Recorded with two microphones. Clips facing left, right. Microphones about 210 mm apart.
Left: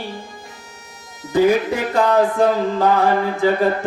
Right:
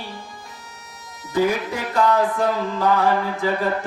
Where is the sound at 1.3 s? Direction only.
25° left (ahead or behind).